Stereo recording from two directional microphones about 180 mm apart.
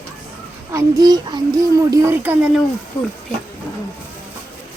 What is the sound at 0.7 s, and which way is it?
A child's voice, 20° right (ahead or behind).